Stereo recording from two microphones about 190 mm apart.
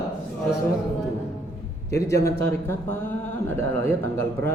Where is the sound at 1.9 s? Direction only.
15° left (ahead or behind).